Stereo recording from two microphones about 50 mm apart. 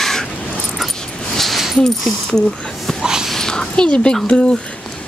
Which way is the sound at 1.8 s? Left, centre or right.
Centre.